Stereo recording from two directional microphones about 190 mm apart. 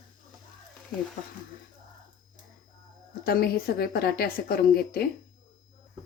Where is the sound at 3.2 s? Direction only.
50° left (ahead or behind).